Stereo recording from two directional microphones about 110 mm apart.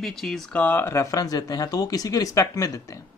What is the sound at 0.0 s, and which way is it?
Speech, 5° left (ahead or behind).